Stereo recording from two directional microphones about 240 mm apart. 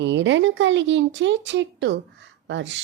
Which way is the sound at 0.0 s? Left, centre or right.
Right.